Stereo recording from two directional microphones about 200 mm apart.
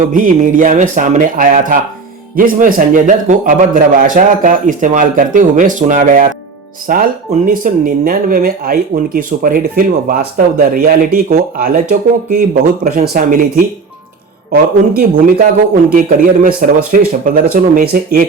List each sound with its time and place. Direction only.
0.1 s a man's voice: 40° right (ahead or behind)
14.5 s speech: 45° right (ahead or behind)